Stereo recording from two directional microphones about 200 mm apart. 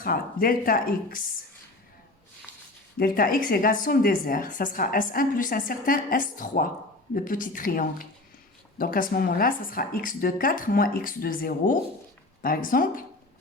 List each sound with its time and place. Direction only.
0.0 s a woman's voice: 45° left (ahead or behind)
3.0 s a woman's voice: 45° left (ahead or behind)